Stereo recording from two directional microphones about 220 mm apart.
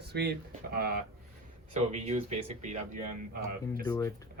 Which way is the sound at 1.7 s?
30° right (ahead or behind).